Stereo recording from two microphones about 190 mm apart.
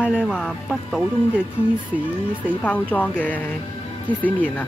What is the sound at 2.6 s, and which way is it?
Speech, 10° left (ahead or behind).